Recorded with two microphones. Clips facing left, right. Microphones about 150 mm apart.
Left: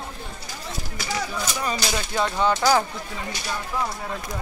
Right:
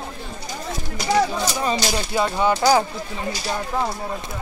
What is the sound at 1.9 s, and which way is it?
Speech, 10° right (ahead or behind).